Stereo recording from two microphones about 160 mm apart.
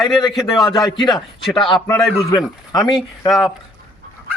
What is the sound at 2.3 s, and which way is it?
Speech, 25° left (ahead or behind).